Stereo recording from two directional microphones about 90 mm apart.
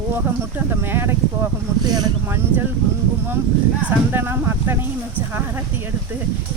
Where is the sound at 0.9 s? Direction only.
25° right (ahead or behind).